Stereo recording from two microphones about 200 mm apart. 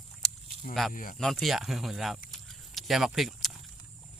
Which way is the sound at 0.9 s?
45° left (ahead or behind).